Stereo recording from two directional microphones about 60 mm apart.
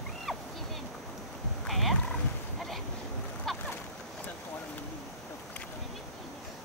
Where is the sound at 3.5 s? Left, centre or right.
Centre.